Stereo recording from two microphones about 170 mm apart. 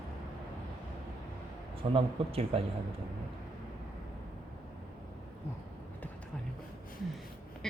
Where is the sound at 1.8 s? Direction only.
35° right (ahead or behind).